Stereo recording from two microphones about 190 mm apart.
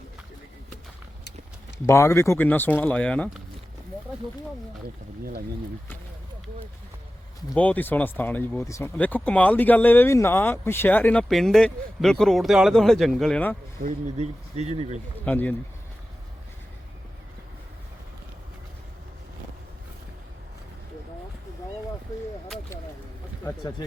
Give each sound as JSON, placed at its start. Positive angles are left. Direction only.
{"t": 1.9, "sound": "speech", "side_deg": 15}
{"t": 7.5, "sound": "speech", "side_deg": 10}
{"t": 13.7, "sound": "speech", "side_deg": -40}
{"t": 15.2, "sound": "speech", "side_deg": 10}